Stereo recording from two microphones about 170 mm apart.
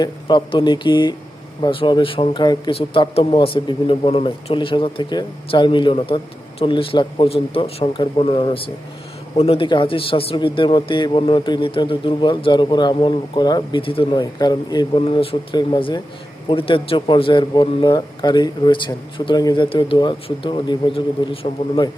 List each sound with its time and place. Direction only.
0.0 s speech: 25° left (ahead or behind)